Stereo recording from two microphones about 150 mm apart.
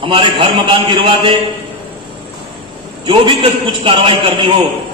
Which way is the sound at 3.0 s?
35° right (ahead or behind).